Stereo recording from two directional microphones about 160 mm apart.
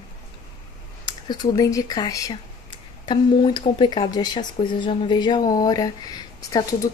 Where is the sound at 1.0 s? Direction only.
25° left (ahead or behind).